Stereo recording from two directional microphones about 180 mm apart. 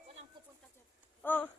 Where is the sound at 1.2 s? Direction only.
10° left (ahead or behind).